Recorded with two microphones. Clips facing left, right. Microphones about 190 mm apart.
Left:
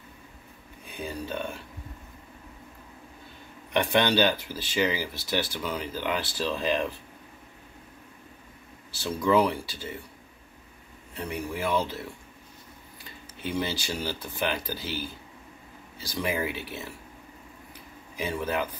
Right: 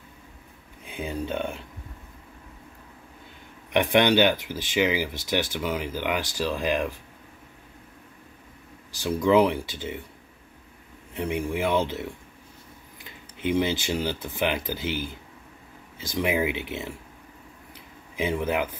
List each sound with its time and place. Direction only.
0.8 s speech: 20° right (ahead or behind)
3.7 s speech: 15° right (ahead or behind)
8.9 s speech: 15° right (ahead or behind)
11.1 s speech: 20° right (ahead or behind)
18.1 s speech: 20° right (ahead or behind)